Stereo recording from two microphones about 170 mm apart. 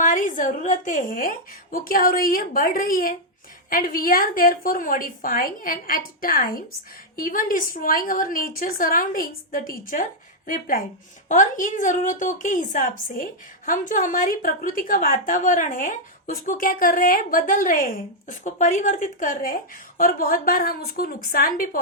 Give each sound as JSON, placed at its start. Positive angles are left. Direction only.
{"t": 0.0, "sound": "a woman's voice", "side_deg": 50}